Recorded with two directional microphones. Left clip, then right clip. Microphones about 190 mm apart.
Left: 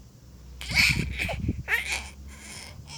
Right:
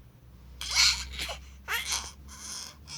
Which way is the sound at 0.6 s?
Centre (ahead or behind).